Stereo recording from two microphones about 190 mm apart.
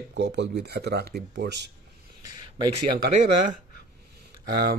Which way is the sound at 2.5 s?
25° right (ahead or behind).